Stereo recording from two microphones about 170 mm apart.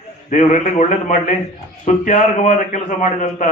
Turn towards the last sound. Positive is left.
turn(degrees=45)  # may be behind; listen again after turning